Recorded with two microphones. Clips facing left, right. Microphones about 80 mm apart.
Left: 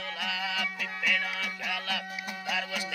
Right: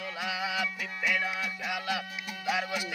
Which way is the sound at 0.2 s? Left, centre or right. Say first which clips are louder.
Right 2 dB; centre.